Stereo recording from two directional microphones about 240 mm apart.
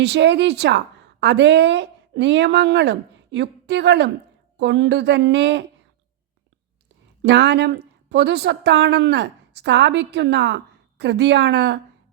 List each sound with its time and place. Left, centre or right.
0.0 s a woman's voice: right
7.2 s a woman's voice: right